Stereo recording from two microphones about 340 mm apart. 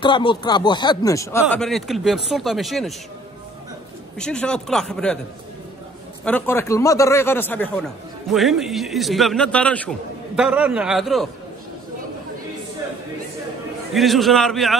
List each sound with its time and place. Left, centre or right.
0.0 s a man's voice: centre
4.2 s a man's voice: centre
6.2 s a man's voice: centre
13.9 s a man's voice: centre